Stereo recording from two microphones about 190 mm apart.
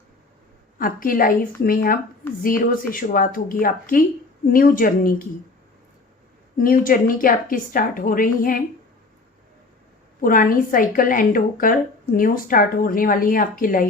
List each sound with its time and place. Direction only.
0.8 s a woman's voice: 50° left (ahead or behind)
6.6 s a woman's voice: 45° left (ahead or behind)
10.2 s a woman's voice: 45° left (ahead or behind)